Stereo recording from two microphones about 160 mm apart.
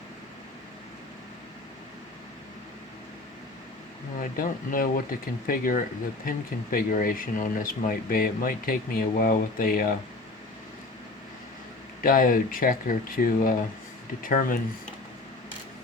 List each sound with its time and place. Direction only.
4.2 s speech: 60° left (ahead or behind)
12.0 s speech: 60° left (ahead or behind)